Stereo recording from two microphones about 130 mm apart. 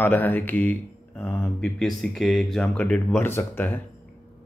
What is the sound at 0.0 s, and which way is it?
Speech, 15° left (ahead or behind).